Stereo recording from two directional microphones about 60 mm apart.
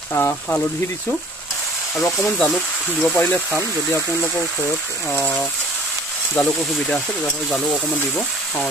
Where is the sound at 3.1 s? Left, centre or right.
Left.